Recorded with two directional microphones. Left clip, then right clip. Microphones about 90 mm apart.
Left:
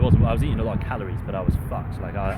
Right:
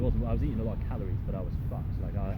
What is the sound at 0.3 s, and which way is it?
Speech, 15° left (ahead or behind).